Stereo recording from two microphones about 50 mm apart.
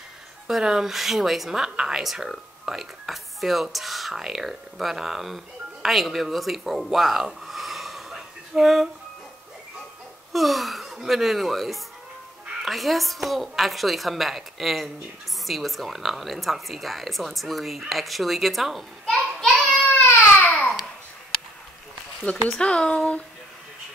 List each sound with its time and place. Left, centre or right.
0.5 s a woman's voice: centre
10.3 s laughter: centre
11.1 s speech: centre
19.0 s a sound: centre
20.1 s baby cry: left
22.2 s speech: left